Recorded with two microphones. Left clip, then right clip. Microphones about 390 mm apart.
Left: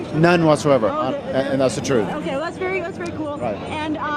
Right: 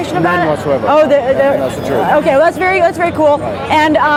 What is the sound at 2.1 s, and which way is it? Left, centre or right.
Speech, centre.